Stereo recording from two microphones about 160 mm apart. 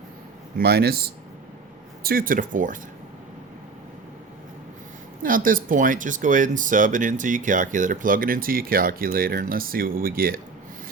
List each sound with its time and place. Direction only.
0.6 s speech: 75° right (ahead or behind)
2.0 s speech: 60° right (ahead or behind)
5.2 s speech: 60° right (ahead or behind)